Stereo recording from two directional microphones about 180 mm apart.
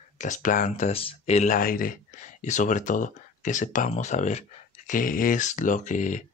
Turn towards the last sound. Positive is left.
turn(degrees=45)  # may be behind; listen again after turning